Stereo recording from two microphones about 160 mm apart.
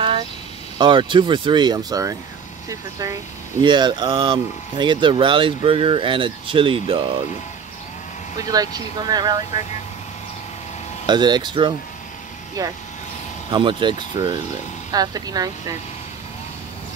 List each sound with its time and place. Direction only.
0.7 s speech: 30° right (ahead or behind)
8.4 s speech: 25° right (ahead or behind)
11.1 s speech: 25° right (ahead or behind)